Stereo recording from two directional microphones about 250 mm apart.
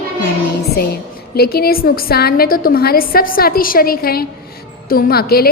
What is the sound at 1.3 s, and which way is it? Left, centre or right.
A woman's voice, left.